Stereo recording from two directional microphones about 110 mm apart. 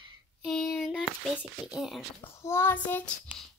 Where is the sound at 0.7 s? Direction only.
Centre (ahead or behind).